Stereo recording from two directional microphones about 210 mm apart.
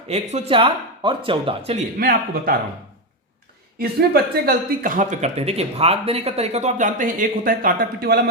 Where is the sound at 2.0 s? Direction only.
45° right (ahead or behind).